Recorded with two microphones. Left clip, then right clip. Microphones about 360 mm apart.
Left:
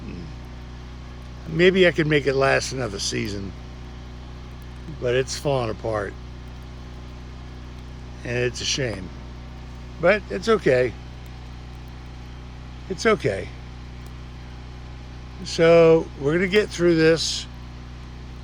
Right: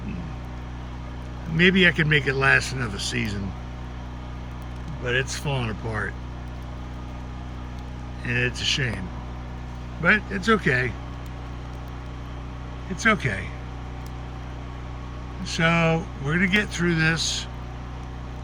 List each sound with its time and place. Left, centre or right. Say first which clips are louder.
1.5 s speech: left 2 dB; centre
5.0 s speech: left 4 dB; centre
8.2 s speech: even; centre
10.0 s speech: left 1 dB; centre
13.0 s speech: left 1 dB; centre
15.4 s speech: left 8 dB; centre